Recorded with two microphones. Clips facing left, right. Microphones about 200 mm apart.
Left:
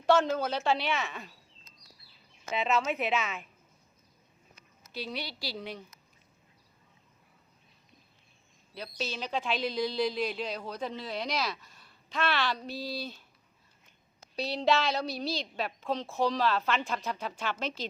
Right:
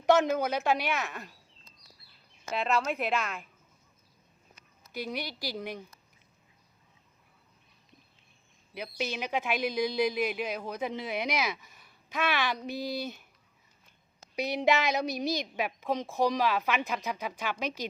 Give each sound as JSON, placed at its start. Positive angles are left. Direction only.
{"t": 0.0, "sound": "a woman's voice", "side_deg": -20}
{"t": 2.5, "sound": "a woman's voice", "side_deg": 0}
{"t": 4.9, "sound": "a woman's voice", "side_deg": -15}
{"t": 9.0, "sound": "a woman's voice", "side_deg": -15}
{"t": 14.3, "sound": "a woman's voice", "side_deg": -15}